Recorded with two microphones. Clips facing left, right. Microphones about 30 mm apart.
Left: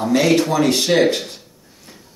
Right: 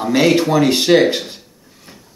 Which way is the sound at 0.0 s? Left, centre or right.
Right.